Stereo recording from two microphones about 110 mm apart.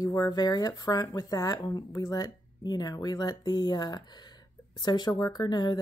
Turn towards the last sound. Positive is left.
turn(degrees=40)  # may be behind; listen again after turning